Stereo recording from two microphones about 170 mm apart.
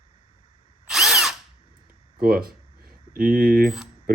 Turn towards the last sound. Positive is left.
turn(degrees=-60)  # may be behind; listen again after turning